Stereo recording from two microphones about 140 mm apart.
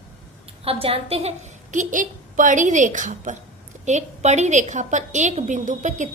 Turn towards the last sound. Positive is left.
turn(degrees=-60)  # may be behind; listen again after turning